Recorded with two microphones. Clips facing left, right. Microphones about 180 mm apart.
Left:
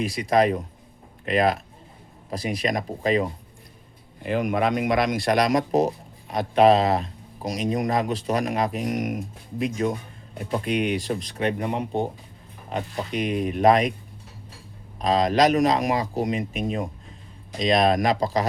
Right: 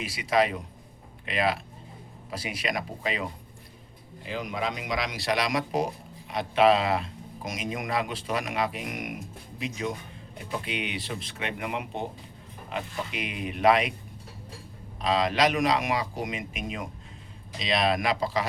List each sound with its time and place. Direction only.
0.2 s speech: 45° left (ahead or behind)
4.2 s speech: 55° left (ahead or behind)
14.9 s speech: 45° left (ahead or behind)